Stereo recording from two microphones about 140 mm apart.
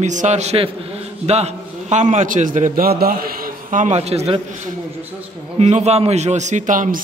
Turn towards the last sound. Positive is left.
turn(degrees=-70)  # may be behind; listen again after turning